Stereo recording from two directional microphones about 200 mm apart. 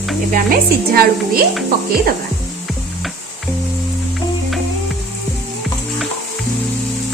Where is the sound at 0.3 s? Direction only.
45° right (ahead or behind).